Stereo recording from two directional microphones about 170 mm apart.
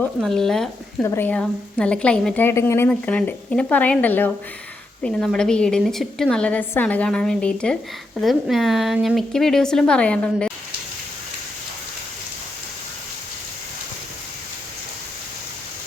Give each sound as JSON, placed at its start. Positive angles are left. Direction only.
{"t": 0.0, "sound": "speech", "side_deg": 0}
{"t": 1.0, "sound": "a woman's voice", "side_deg": 15}